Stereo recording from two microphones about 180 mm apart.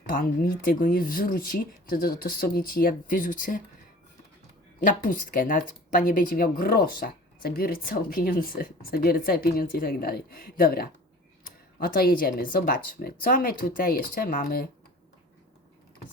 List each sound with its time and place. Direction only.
0.0 s speech: 50° left (ahead or behind)
4.8 s speech: 50° left (ahead or behind)